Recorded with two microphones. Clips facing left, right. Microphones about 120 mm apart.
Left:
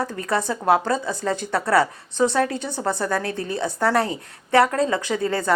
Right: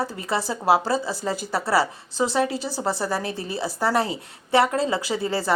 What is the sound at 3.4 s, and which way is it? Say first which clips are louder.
Speech: left 2 dB; 5° right (ahead or behind).